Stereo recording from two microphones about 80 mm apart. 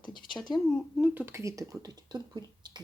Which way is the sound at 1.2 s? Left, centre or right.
Right.